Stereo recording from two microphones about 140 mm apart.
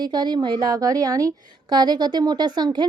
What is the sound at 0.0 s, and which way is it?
Speech, 30° right (ahead or behind).